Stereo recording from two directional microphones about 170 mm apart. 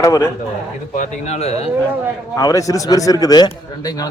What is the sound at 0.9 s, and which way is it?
Speech, 45° left (ahead or behind).